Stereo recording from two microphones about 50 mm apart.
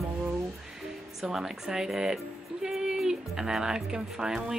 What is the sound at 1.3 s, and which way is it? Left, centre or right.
Speech, centre.